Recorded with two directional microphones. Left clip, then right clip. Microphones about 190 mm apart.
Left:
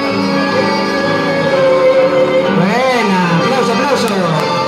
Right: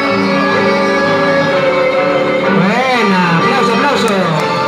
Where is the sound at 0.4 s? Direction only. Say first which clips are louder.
Right 1 dB; 30° left (ahead or behind).